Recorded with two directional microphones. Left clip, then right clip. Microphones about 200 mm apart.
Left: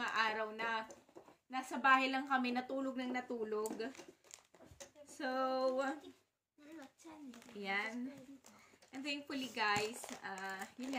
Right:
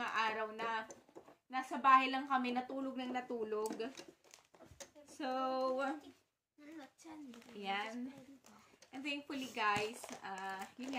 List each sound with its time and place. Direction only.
0.0 s a sound: centre (ahead or behind)
1.5 s a woman's voice: 5° left (ahead or behind)
5.0 s speech: centre (ahead or behind)
7.0 s a sound: 50° right (ahead or behind)
7.5 s a woman's voice: centre (ahead or behind)
8.9 s a woman's voice: centre (ahead or behind)